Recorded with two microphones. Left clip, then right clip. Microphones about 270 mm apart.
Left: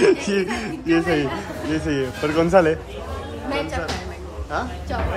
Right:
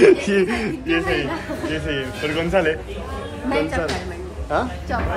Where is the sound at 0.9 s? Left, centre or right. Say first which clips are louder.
Left 1 dB; left.